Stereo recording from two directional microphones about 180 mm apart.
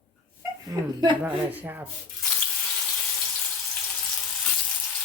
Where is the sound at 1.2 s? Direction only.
10° right (ahead or behind).